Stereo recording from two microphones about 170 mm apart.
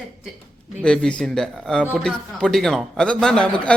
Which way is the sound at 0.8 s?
5° left (ahead or behind).